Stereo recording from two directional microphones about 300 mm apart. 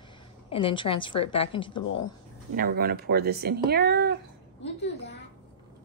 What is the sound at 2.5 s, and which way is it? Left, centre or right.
Speech, right.